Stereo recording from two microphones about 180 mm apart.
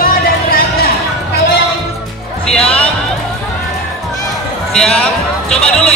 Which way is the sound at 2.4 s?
5° left (ahead or behind).